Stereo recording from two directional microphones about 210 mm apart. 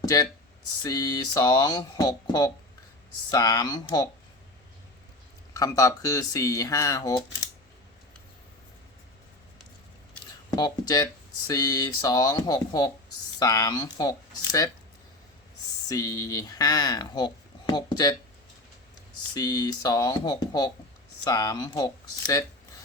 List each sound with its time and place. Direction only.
0.0 s speech: 15° left (ahead or behind)
5.5 s speech: 15° left (ahead or behind)
10.5 s speech: 20° left (ahead or behind)
15.9 s speech: 15° left (ahead or behind)
19.3 s speech: 20° left (ahead or behind)